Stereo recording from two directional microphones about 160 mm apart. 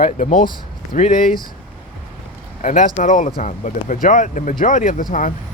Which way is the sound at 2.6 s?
55° left (ahead or behind).